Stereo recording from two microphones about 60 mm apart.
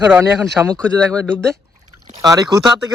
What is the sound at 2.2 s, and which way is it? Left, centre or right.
Speech, right.